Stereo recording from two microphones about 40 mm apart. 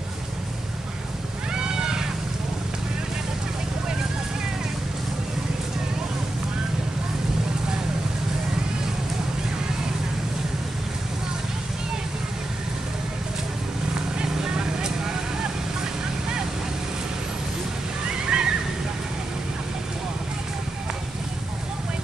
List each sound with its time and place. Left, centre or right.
1.5 s cat: centre
13.9 s vehicle: centre
18.0 s water: right